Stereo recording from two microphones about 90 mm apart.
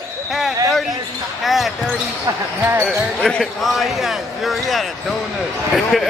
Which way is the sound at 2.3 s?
50° right (ahead or behind).